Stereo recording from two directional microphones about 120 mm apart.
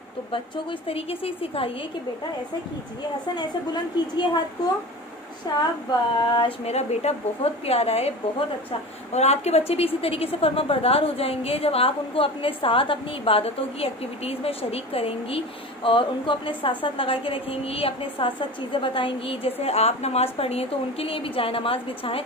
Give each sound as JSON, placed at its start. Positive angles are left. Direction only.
{"t": 0.3, "sound": "a woman's voice", "side_deg": 50}
{"t": 5.5, "sound": "speech", "side_deg": 35}
{"t": 6.6, "sound": "a woman's voice", "side_deg": 65}
{"t": 9.1, "sound": "a woman's voice", "side_deg": 65}